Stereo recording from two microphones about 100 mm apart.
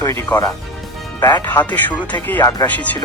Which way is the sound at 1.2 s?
45° left (ahead or behind).